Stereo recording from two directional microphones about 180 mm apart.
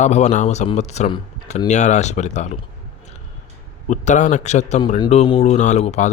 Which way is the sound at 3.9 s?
40° left (ahead or behind).